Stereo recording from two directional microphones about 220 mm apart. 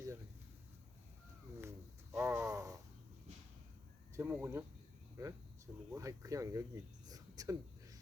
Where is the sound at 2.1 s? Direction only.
10° right (ahead or behind).